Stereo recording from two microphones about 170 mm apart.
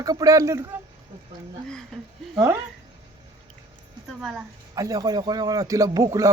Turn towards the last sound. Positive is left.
turn(degrees=-20)  # may be behind; listen again after turning